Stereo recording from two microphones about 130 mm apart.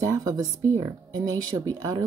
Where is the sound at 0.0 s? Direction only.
25° right (ahead or behind).